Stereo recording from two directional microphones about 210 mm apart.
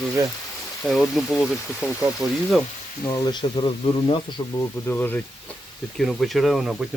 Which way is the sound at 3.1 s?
20° left (ahead or behind).